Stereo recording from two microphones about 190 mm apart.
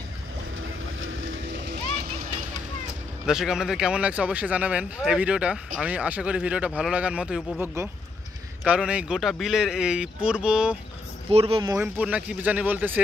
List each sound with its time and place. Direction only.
1.0 s boat: 80° right
3.3 s speech: 5° right (ahead or behind)
11.2 s speech: 30° right (ahead or behind)
11.7 s speech: 10° right (ahead or behind)